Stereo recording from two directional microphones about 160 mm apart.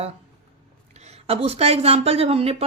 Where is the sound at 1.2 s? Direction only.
40° right (ahead or behind).